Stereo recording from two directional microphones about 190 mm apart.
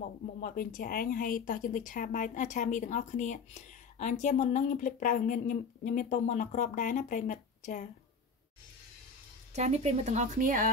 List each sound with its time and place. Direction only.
0.0 s speech: 45° left (ahead or behind)
9.5 s speech: 35° right (ahead or behind)